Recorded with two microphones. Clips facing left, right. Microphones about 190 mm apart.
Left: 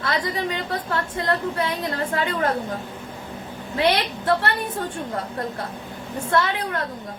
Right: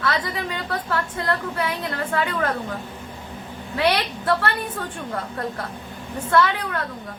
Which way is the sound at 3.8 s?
25° left (ahead or behind).